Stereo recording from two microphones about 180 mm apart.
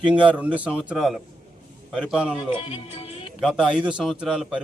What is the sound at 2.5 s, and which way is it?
Speech, 30° left (ahead or behind).